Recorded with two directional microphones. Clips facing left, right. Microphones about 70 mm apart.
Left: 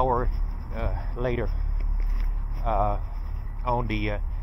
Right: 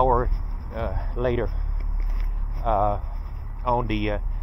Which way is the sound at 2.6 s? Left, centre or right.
Right.